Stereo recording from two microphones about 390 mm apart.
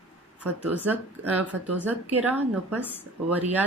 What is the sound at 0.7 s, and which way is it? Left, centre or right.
A woman's voice, centre.